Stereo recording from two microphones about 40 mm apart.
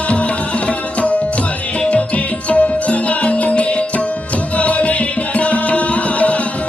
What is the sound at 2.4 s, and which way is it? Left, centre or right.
Music, left.